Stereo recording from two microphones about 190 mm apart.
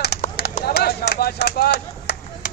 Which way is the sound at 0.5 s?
55° left (ahead or behind).